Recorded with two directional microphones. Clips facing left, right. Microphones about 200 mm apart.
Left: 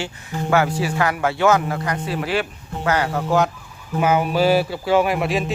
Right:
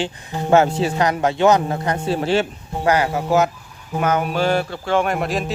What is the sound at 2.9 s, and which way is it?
Speech, 10° right (ahead or behind).